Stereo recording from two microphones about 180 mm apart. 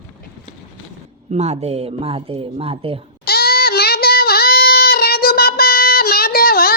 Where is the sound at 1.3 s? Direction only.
40° right (ahead or behind).